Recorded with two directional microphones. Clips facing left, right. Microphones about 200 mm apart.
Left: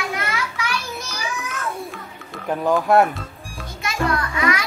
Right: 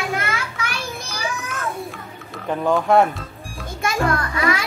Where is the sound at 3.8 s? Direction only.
50° right (ahead or behind).